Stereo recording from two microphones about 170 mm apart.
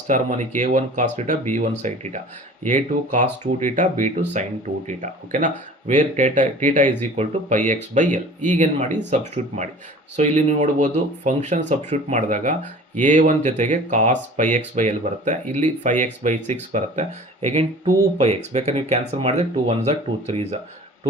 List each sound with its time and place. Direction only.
0.1 s speech: 45° right (ahead or behind)